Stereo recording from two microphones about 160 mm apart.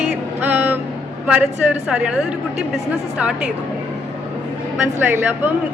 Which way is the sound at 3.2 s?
5° right (ahead or behind).